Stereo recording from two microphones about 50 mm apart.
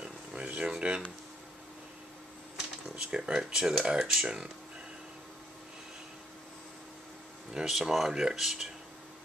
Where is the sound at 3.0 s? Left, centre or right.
Centre.